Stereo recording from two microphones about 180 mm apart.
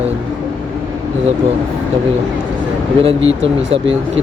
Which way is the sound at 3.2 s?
90° right.